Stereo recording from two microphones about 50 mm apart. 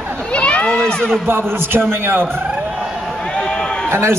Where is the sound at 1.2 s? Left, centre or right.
Right.